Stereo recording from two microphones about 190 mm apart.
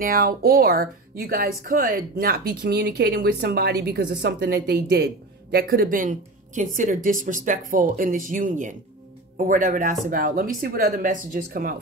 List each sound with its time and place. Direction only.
0.0 s speech: 50° right (ahead or behind)